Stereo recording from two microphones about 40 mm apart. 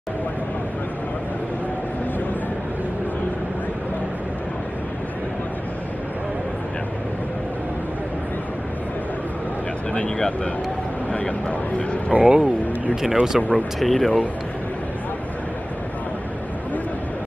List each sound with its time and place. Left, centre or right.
9.9 s speech: left
11.1 s a sound: left
12.1 s speech: right
13.0 s speech: centre
13.4 s speech: left
13.7 s speech: centre